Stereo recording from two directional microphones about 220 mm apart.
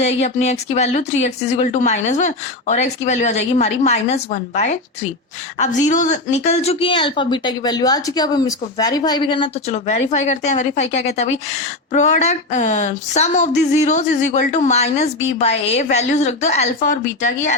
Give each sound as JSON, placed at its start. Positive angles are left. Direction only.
{"t": 0.0, "sound": "a woman's voice", "side_deg": 30}